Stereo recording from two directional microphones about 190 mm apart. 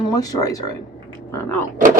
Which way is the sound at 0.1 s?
20° left (ahead or behind).